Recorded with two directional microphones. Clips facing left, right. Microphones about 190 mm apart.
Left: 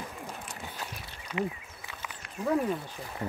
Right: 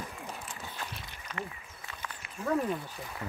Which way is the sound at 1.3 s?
10° left (ahead or behind).